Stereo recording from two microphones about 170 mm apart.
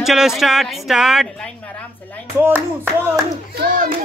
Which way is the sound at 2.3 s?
10° right (ahead or behind).